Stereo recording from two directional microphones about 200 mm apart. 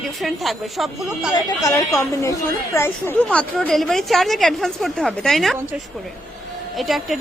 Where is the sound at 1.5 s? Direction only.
15° left (ahead or behind); by 5.5 s centre (ahead or behind).